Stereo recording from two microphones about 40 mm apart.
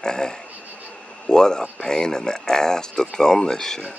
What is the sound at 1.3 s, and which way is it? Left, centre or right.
Speech, centre.